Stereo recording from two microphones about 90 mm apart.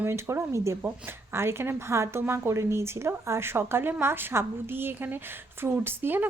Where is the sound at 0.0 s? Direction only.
25° right (ahead or behind).